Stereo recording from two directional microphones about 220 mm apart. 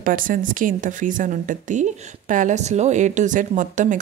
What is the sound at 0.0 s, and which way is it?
A woman's voice, 40° right (ahead or behind).